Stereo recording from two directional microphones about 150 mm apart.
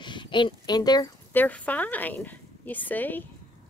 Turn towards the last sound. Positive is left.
turn(degrees=10)  # may be behind; listen again after turning